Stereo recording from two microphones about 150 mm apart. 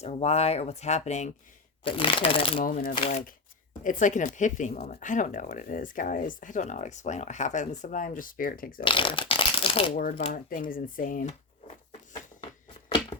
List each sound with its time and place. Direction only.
0.0 s speech: 45° left (ahead or behind)
1.8 s speech: 35° left (ahead or behind)
2.6 s speech: 70° left (ahead or behind)
8.8 s speech: 35° left (ahead or behind)
10.3 s speech: 65° left (ahead or behind)